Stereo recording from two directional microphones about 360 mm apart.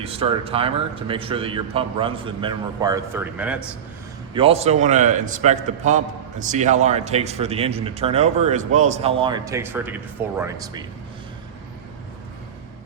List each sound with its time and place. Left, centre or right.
0.0 s speech: centre
4.4 s a man's voice: centre